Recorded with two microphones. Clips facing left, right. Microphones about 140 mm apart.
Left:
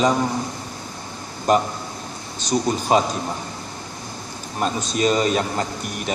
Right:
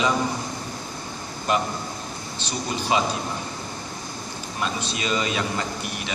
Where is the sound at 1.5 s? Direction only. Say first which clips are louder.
Left 5 dB; 45° left (ahead or behind).